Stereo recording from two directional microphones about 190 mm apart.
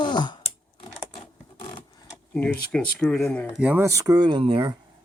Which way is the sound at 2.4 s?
5° left (ahead or behind).